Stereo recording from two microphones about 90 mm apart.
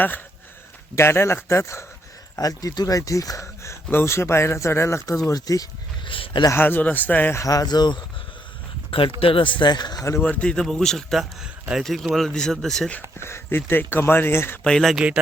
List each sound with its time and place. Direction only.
0.9 s speech: 30° left (ahead or behind)
6.1 s speech: 75° left (ahead or behind)
6.5 s speech: 25° left (ahead or behind)
7.3 s speech: 40° left (ahead or behind)
9.2 s speech: 75° left (ahead or behind); by 10.0 s 55° left (ahead or behind)
10.0 s speech: 35° left (ahead or behind)
10.2 s speech: 15° left (ahead or behind)
13.1 s speech: 30° left (ahead or behind)
14.6 s speech: 5° left (ahead or behind)
14.9 s speech: 10° right (ahead or behind)